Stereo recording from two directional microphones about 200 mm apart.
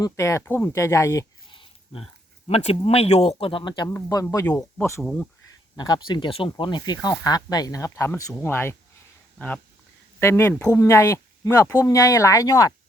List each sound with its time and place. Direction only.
0.0 s speech: 15° left (ahead or behind)
5.7 s speech: 20° left (ahead or behind)
10.2 s speech: 10° left (ahead or behind)